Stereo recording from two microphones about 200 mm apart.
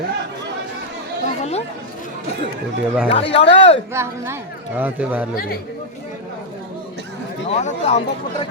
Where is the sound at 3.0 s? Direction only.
30° left (ahead or behind).